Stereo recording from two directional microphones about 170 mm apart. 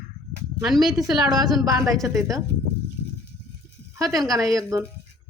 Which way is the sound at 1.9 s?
Centre (ahead or behind).